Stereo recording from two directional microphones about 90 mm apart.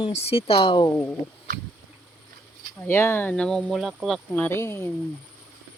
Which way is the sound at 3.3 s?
10° left (ahead or behind).